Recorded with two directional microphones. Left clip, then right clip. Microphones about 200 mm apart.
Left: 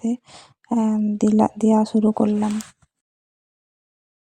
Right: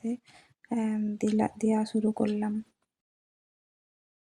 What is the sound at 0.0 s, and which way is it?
Speech, 30° left (ahead or behind).